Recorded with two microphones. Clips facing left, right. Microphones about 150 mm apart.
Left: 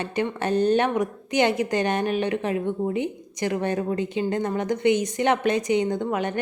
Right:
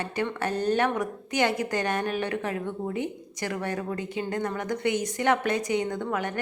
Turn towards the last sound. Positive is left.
turn(degrees=20)  # may be behind; listen again after turning